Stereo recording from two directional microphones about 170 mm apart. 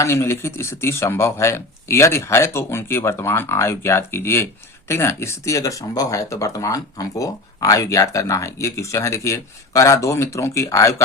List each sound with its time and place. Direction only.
0.0 s speech: 15° left (ahead or behind)